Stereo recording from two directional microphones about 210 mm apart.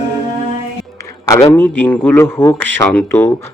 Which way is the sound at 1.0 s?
15° left (ahead or behind).